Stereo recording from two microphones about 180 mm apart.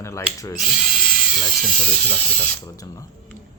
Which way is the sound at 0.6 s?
5° right (ahead or behind).